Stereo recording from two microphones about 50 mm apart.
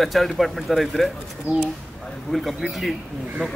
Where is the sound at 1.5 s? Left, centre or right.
Right.